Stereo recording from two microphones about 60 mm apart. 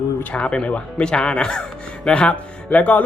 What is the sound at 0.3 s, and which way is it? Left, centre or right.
Speech, centre.